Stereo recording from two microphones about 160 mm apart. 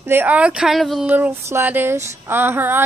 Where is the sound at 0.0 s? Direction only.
10° right (ahead or behind).